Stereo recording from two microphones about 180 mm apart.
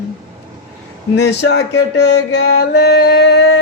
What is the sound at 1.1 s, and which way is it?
Music, 70° left (ahead or behind).